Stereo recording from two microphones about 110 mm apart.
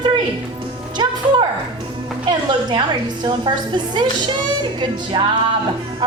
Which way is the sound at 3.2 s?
45° right (ahead or behind).